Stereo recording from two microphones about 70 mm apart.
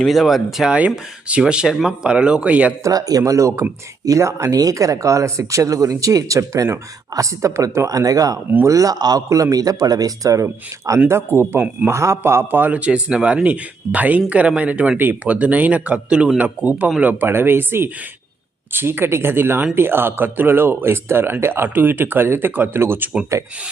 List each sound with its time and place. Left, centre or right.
0.0 s speech: centre
0.7 s speech: centre
2.8 s speech: right
4.5 s speech: right
9.3 s speech: right
11.1 s a man's voice: right